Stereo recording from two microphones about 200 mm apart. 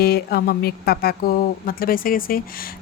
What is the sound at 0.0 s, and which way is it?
Speech, 50° left (ahead or behind).